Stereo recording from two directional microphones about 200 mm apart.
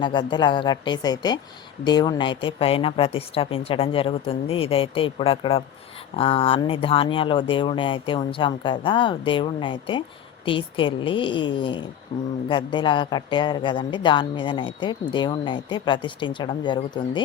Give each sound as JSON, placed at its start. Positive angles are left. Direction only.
{"t": 0.0, "sound": "speech", "side_deg": 20}